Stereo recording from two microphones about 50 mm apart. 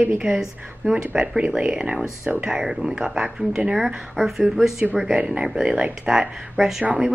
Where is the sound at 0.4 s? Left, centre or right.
Centre.